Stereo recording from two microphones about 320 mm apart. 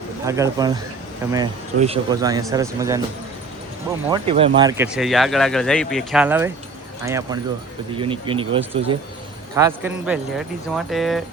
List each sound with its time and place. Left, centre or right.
0.3 s speech: centre
4.1 s speech: centre